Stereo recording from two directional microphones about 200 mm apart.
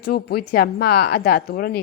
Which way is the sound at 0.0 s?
50° left (ahead or behind).